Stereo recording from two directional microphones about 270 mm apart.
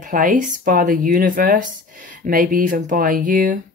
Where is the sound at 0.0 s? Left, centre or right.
Right.